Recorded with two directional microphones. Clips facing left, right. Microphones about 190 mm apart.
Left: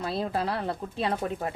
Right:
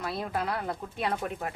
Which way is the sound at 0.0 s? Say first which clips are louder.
Left 3 dB; 30° left (ahead or behind).